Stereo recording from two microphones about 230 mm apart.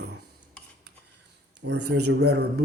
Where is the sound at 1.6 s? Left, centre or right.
Right.